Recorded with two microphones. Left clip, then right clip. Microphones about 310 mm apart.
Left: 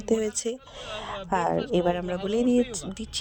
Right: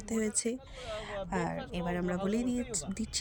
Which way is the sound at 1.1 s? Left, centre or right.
Left.